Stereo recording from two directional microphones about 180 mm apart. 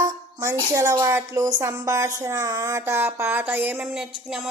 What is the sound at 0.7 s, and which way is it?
A woman's voice, 20° right (ahead or behind).